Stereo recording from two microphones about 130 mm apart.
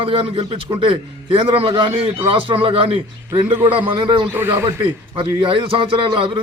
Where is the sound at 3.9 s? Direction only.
35° right (ahead or behind).